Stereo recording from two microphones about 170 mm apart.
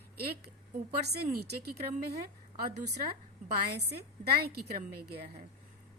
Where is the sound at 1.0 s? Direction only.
70° right (ahead or behind).